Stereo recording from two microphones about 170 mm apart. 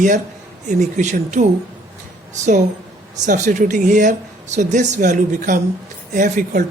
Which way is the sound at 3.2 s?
45° right (ahead or behind).